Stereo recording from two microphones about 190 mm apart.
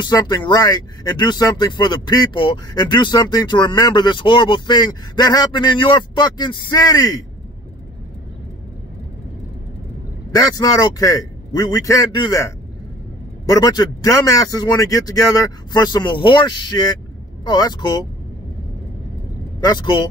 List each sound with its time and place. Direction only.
0.0 s speech: 20° left (ahead or behind)
10.3 s speech: 20° left (ahead or behind)
19.6 s speech: 25° left (ahead or behind)